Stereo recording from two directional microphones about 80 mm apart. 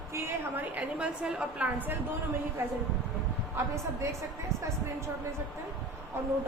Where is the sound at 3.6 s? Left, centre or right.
Right.